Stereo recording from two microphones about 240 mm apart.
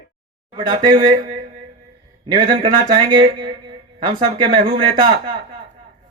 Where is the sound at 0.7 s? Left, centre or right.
Centre.